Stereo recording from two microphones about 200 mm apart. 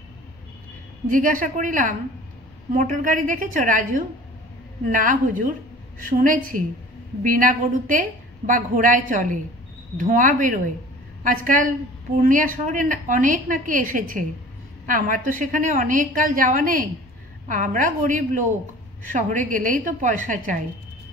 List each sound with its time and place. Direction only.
1.0 s a woman's voice: 40° right (ahead or behind)